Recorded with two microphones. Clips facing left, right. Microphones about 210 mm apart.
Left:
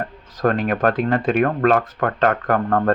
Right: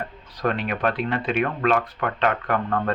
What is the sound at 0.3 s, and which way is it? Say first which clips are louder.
Speech: left 6 dB; 45° left (ahead or behind).